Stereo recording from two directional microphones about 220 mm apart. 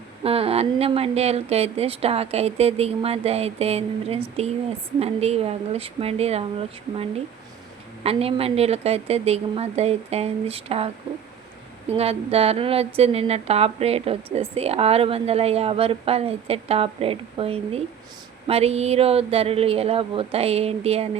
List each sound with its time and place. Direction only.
0.2 s speech: 25° right (ahead or behind)
11.9 s speech: 25° right (ahead or behind)